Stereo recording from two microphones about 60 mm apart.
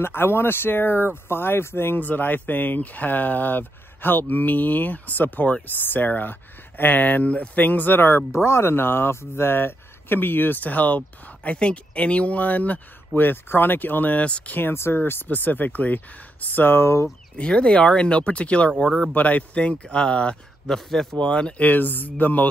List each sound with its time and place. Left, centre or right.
0.0 s speech: left
2.0 s speech: left
14.6 s speech: left
17.4 s speech: centre
18.8 s speech: centre
19.1 s speech: left
20.7 s speech: centre
21.6 s speech: left